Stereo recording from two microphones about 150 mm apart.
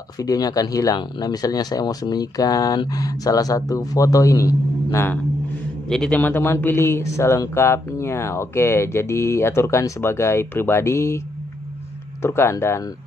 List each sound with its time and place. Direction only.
0.2 s a man's voice: 25° left (ahead or behind)
12.2 s a man's voice: 15° left (ahead or behind)